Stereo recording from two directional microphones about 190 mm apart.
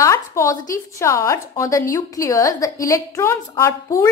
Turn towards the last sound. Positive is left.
turn(degrees=15)  # may be behind; listen again after turning